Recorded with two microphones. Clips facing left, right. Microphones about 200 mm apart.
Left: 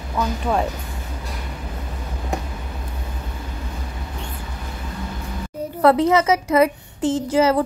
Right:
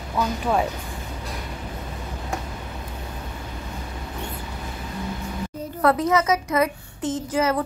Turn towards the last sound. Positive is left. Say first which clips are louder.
# left 5 dB
turn(degrees=30)  # may be behind; listen again after turning